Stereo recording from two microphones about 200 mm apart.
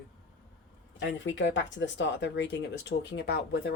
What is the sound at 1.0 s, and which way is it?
Speech, 65° left (ahead or behind).